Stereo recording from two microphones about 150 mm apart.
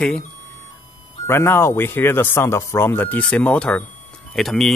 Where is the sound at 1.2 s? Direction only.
15° left (ahead or behind).